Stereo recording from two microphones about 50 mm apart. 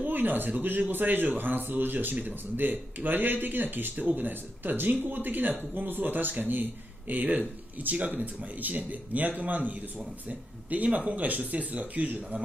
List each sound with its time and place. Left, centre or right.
0.0 s speech: right